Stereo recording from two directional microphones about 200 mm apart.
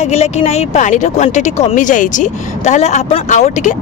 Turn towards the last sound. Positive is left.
turn(degrees=35)  # may be behind; listen again after turning